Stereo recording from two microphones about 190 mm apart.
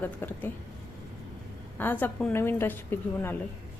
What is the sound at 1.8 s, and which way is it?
A woman's voice, 10° left (ahead or behind).